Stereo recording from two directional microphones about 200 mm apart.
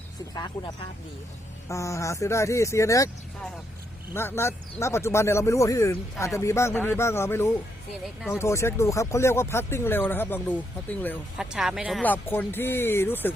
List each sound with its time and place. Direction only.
0.6 s speech: 20° left (ahead or behind)
4.1 s speech: 10° left (ahead or behind)
11.3 s speech: centre (ahead or behind)